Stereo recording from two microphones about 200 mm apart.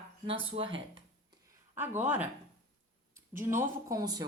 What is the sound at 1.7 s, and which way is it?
Speech, 10° right (ahead or behind).